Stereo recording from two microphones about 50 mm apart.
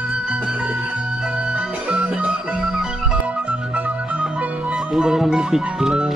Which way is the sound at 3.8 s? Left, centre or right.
Right.